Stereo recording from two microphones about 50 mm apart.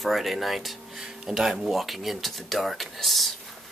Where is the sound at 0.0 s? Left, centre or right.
Centre.